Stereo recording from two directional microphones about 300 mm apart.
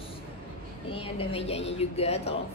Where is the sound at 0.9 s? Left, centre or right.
Centre.